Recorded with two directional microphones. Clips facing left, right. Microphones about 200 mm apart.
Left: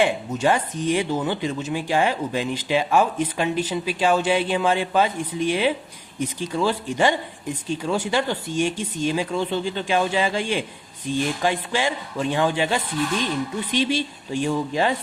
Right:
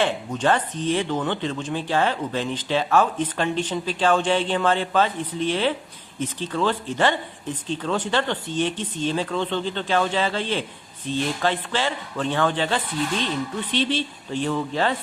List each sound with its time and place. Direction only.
0.0 s speech: 10° left (ahead or behind)